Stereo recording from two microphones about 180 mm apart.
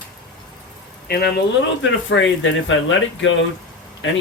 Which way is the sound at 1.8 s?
90° left.